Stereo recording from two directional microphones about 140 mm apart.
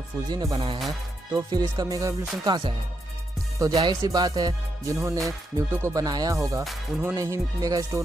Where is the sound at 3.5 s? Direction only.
25° right (ahead or behind).